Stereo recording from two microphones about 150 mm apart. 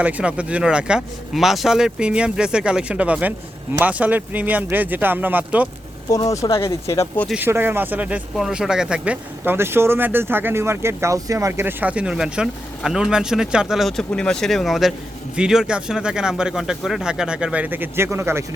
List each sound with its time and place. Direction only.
0.0 s speech: 10° right (ahead or behind)
6.1 s speech: 20° left (ahead or behind)
7.3 s speech: 15° right (ahead or behind)